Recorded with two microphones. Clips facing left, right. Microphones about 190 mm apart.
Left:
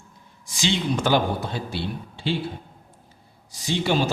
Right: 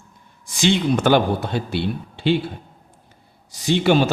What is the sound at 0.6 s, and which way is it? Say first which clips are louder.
A man's voice: right 6 dB; 60° right (ahead or behind).